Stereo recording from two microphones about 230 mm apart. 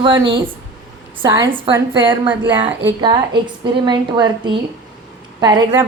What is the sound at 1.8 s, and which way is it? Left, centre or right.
A woman's voice, centre.